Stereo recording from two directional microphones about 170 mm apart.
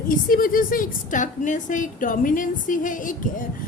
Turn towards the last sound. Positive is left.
turn(degrees=50)  # may be behind; listen again after turning